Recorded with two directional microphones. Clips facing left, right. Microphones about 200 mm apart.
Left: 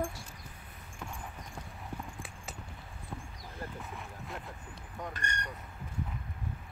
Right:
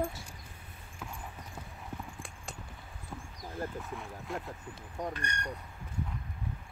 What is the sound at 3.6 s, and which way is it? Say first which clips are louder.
Speech: right 5 dB; 45° right (ahead or behind).